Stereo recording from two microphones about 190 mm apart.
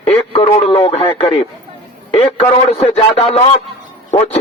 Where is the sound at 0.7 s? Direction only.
20° left (ahead or behind).